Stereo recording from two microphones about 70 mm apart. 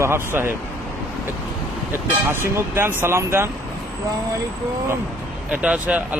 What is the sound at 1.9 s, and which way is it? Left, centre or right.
Speech, right.